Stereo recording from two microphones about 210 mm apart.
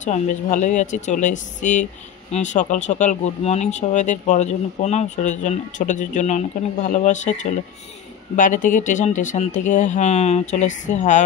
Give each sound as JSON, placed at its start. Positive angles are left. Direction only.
{"t": 0.0, "sound": "speech", "side_deg": 35}